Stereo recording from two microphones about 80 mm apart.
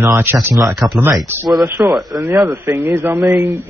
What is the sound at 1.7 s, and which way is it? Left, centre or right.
Speech, right.